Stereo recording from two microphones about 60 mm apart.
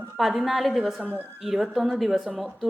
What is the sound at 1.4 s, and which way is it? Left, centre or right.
Speech, centre.